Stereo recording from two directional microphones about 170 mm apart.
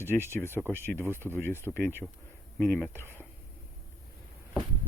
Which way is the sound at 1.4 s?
15° left (ahead or behind).